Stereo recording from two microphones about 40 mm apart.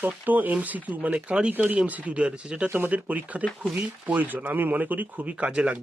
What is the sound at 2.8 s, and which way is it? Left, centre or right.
Speech, right.